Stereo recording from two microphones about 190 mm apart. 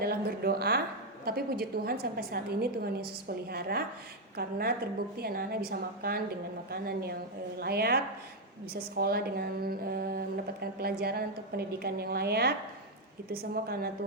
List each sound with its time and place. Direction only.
0.0 s a woman's voice: 55° right (ahead or behind)